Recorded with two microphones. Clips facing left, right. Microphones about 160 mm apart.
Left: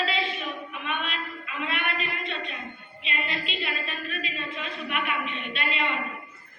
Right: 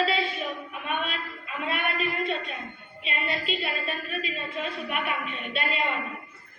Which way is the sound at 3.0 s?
40° right (ahead or behind).